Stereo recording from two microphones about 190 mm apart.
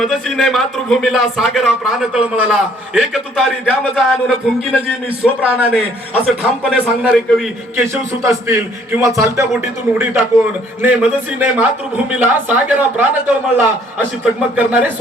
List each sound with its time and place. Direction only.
0.0 s a man's voice: centre (ahead or behind)
7.8 s a man's voice: 15° right (ahead or behind)
14.5 s a man's voice: 10° right (ahead or behind)